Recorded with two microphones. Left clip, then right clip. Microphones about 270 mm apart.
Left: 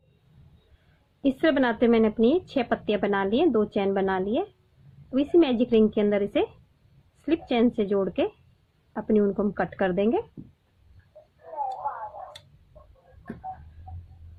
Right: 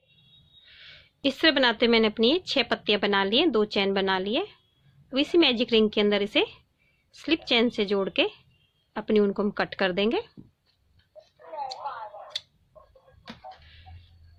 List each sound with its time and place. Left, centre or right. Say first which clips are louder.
1.2 s speech: right 1 dB; right
13.9 s music: left 10 dB; right